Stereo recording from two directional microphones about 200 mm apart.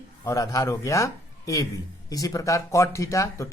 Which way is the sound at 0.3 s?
15° left (ahead or behind).